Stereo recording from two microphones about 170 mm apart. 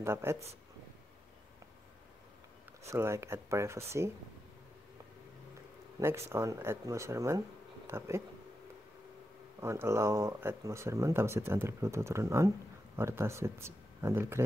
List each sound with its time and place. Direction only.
0.0 s speech: 15° right (ahead or behind)
2.9 s speech: 15° right (ahead or behind)
5.9 s speech: 15° right (ahead or behind)
9.6 s speech: 15° right (ahead or behind)